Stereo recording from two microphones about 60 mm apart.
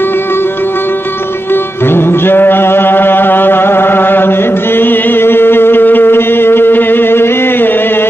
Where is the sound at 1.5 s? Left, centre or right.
Left.